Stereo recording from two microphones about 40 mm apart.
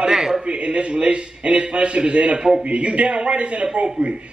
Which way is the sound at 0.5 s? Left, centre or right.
Right.